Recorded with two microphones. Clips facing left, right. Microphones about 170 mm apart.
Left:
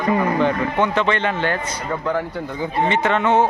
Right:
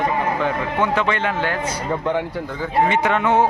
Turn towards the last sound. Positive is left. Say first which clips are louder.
# even
turn(degrees=-10)  # may be behind; listen again after turning